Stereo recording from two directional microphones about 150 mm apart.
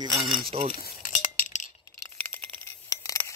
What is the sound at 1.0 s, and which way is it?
Chink, 60° left (ahead or behind).